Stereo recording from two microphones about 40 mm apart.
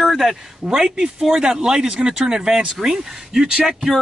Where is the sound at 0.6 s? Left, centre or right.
Centre.